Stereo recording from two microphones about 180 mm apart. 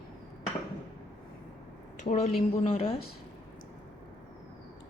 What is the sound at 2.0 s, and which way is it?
Speech, 40° left (ahead or behind).